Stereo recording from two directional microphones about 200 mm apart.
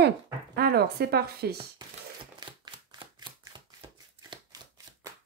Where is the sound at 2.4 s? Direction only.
20° right (ahead or behind).